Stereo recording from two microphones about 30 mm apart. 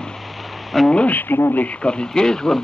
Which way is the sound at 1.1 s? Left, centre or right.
Left.